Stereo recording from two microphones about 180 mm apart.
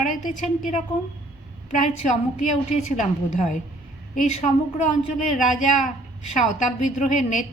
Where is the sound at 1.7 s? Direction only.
40° left (ahead or behind).